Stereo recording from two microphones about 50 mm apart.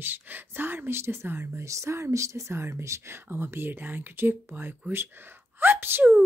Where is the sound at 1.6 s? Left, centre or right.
Right.